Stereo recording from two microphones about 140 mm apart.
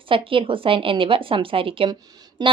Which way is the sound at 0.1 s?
40° right (ahead or behind).